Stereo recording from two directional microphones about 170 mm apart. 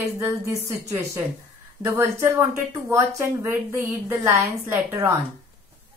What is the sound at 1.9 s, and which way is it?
Speech, 15° right (ahead or behind).